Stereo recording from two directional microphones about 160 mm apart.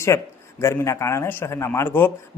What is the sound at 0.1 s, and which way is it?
A man's voice, 15° left (ahead or behind).